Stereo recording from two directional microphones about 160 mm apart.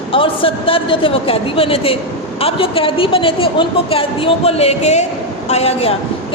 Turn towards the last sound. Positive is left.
turn(degrees=40)  # may be behind; listen again after turning